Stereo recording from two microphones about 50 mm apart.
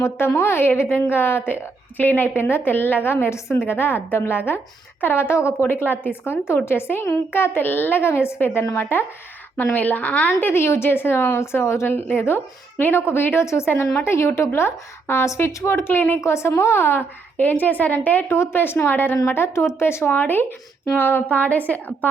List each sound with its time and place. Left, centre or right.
0.0 s a woman's voice: left
2.0 s a woman's voice: left
5.6 s a woman's voice: left
9.7 s a woman's voice: left
10.4 s a woman's voice: left
11.9 s a woman's voice: left
13.4 s a woman's voice: left
13.7 s a woman's voice: left
16.0 s a woman's voice: left
16.2 s a woman's voice: left
17.3 s a woman's voice: left
18.3 s a woman's voice: left
19.5 s speech: left
20.1 s a woman's voice: left